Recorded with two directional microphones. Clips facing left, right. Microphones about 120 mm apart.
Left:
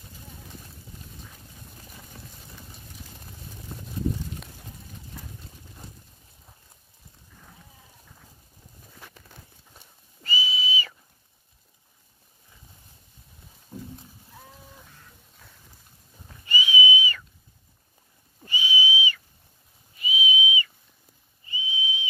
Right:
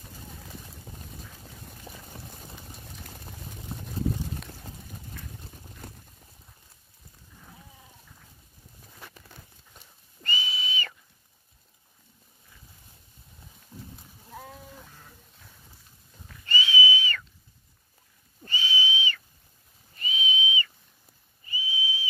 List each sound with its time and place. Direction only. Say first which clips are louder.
5.8 s boat: right 3 dB; 60° right (ahead or behind)
10.2 s whistle: left 3 dB; 5° left (ahead or behind)
13.7 s horse: left 6 dB; 25° left (ahead or behind)
16.4 s whistle: left 1 dB; 15° left (ahead or behind)
18.4 s whistle: left 2 dB; 10° left (ahead or behind)